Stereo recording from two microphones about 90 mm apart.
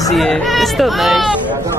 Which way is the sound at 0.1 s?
Centre (ahead or behind).